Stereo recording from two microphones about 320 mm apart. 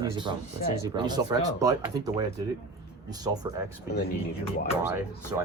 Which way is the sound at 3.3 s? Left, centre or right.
Centre.